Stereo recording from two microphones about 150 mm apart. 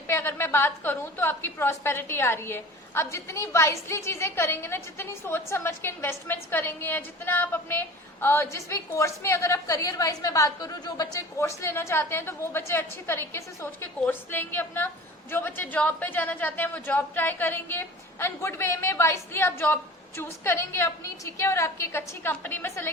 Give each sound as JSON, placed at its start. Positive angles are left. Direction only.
{"t": 0.1, "sound": "a woman's voice", "side_deg": 15}